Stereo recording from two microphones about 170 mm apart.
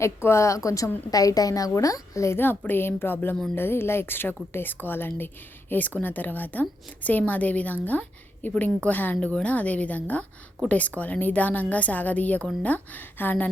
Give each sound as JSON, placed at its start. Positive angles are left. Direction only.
{"t": 0.0, "sound": "speech", "side_deg": 15}